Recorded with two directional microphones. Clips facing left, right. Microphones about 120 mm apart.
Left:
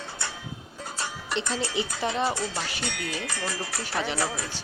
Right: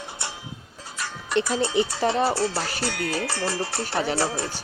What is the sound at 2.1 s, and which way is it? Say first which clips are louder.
Music: right 5 dB; 35° right (ahead or behind).